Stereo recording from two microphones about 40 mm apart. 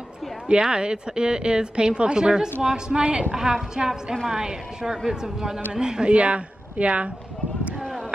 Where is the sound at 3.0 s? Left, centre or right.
Right.